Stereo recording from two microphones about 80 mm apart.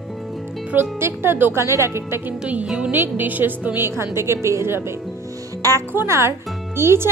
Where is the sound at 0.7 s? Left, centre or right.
Right.